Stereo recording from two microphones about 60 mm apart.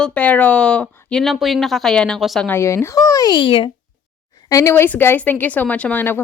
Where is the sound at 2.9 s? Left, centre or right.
Left.